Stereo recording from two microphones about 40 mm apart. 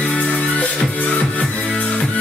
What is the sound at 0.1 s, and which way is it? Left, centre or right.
Music, left.